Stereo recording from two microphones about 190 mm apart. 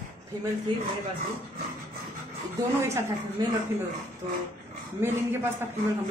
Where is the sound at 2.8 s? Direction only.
15° right (ahead or behind).